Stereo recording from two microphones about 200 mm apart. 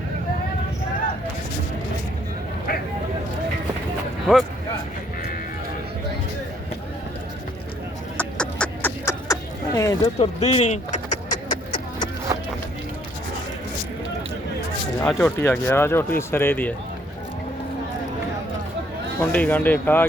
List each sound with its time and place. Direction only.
4.3 s speech: centre (ahead or behind)
8.2 s a sound: 5° left (ahead or behind)
10.2 s vehicle: 30° left (ahead or behind)
15.0 s speech: 10° left (ahead or behind)
19.2 s speech: 5° left (ahead or behind)